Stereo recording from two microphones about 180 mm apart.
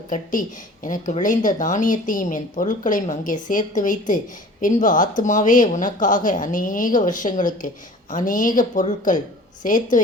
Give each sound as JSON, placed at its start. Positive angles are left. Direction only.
{"t": 0.1, "sound": "speech", "side_deg": 50}